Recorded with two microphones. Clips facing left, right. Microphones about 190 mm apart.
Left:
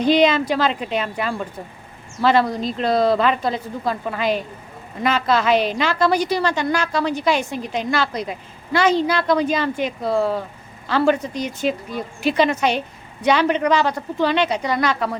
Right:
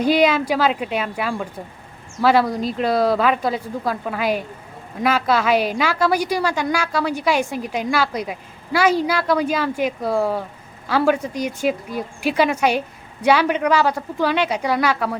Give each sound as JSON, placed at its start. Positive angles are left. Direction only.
{"t": 0.0, "sound": "a woman's voice", "side_deg": -10}